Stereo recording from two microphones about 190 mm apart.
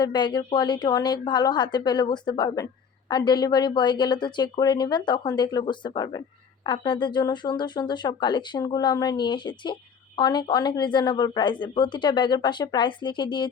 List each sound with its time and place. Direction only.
0.0 s speech: 25° left (ahead or behind)